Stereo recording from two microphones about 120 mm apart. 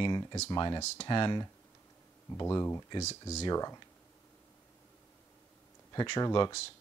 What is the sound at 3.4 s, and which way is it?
Speech, 30° left (ahead or behind).